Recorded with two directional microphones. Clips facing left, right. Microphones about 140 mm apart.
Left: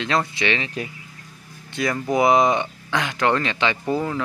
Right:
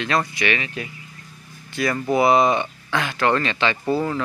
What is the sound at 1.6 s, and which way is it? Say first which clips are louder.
Music: right 1 dB; 20° left (ahead or behind).